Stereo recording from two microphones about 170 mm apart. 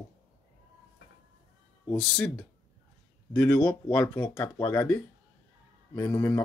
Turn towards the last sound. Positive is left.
turn(degrees=15)  # may be behind; listen again after turning